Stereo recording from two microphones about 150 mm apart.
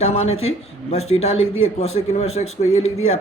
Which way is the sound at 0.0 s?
45° left (ahead or behind).